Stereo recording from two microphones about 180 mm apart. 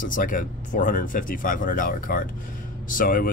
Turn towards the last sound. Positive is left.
turn(degrees=50)  # may be behind; listen again after turning